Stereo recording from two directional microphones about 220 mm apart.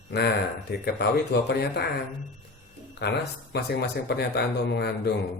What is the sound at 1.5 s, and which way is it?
Speech, 50° left (ahead or behind).